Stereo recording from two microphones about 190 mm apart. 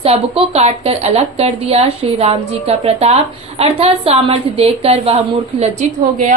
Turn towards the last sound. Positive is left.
turn(degrees=-40)  # may be behind; listen again after turning